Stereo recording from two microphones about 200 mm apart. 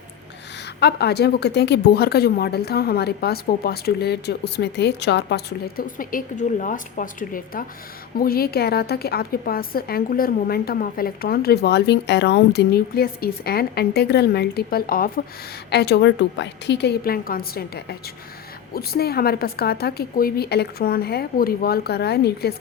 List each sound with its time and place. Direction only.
0.8 s a woman's voice: 55° left (ahead or behind)